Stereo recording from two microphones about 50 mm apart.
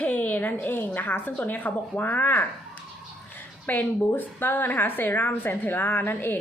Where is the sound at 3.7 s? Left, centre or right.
Left.